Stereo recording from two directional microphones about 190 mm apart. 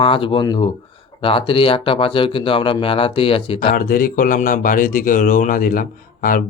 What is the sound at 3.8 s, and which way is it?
Speech, 45° left (ahead or behind).